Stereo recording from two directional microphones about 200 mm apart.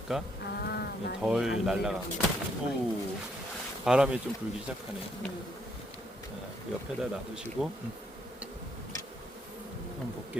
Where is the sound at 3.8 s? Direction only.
5° right (ahead or behind).